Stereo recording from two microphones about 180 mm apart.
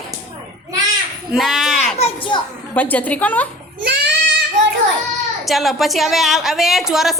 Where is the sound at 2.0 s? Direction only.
30° left (ahead or behind).